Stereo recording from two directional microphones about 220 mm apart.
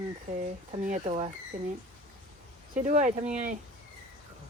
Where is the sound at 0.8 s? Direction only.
35° right (ahead or behind).